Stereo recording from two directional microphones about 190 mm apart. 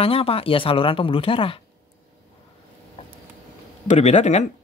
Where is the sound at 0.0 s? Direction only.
30° left (ahead or behind).